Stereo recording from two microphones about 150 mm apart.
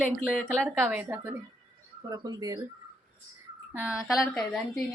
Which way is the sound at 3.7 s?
10° right (ahead or behind).